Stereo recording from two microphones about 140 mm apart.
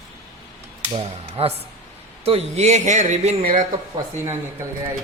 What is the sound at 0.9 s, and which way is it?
Speech, 45° right (ahead or behind).